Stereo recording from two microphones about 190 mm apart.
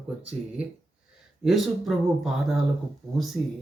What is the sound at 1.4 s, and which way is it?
Speech, centre (ahead or behind).